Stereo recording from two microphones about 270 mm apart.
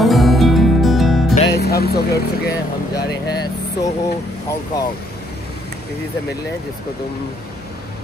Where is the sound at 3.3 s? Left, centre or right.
Centre.